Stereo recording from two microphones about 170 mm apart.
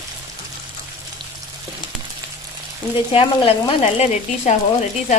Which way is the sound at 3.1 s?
35° left (ahead or behind).